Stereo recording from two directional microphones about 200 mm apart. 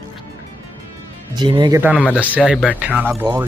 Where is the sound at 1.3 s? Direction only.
20° right (ahead or behind).